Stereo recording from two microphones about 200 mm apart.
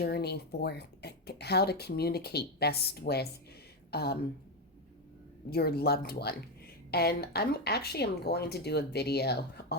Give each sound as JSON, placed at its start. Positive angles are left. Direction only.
{"t": 0.0, "sound": "speech", "side_deg": 55}
{"t": 5.5, "sound": "speech", "side_deg": 50}